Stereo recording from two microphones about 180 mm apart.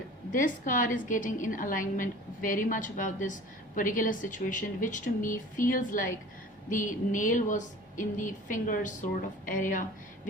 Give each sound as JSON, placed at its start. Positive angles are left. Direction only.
{"t": 0.3, "sound": "a woman's voice", "side_deg": 45}